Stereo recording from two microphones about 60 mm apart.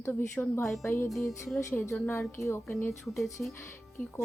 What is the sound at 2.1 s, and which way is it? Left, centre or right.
Speech, left.